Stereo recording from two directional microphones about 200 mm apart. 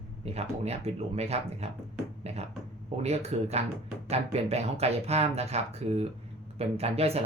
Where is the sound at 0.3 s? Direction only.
30° right (ahead or behind).